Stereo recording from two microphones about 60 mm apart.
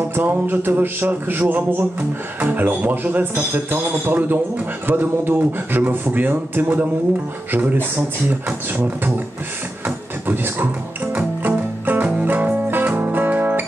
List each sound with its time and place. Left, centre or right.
0.1 s music: right